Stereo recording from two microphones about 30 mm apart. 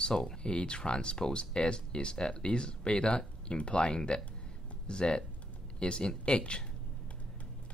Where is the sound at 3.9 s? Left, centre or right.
Left.